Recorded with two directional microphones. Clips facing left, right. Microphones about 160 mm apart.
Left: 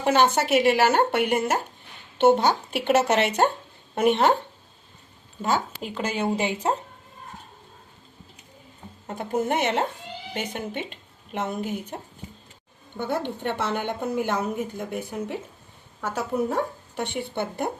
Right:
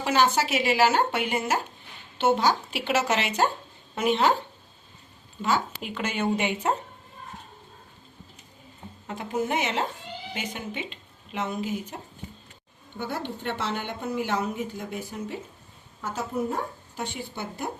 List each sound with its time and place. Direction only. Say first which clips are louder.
0.0 s speech: left 3 dB; 55° left (ahead or behind)
5.4 s a woman's voice: left 1 dB; 45° left (ahead or behind)
9.0 s a woman's voice: left 3 dB; 45° left (ahead or behind)
13.0 s a woman's voice: left 5 dB; 50° left (ahead or behind)
16.0 s speech: left 3 dB; 70° left (ahead or behind)